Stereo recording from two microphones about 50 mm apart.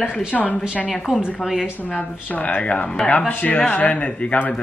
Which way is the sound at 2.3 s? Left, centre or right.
Left.